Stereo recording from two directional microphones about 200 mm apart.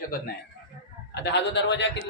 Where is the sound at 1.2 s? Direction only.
60° left (ahead or behind).